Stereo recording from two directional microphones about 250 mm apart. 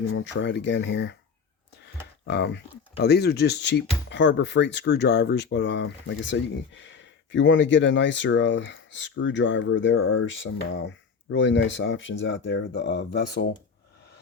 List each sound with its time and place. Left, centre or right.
0.1 s speech: left
2.2 s speech: left